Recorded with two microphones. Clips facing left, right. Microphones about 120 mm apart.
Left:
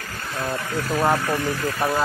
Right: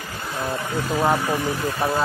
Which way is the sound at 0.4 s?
15° right (ahead or behind).